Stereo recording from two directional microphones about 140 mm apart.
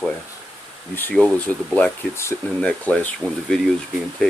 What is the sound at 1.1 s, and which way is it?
Speech, 10° left (ahead or behind).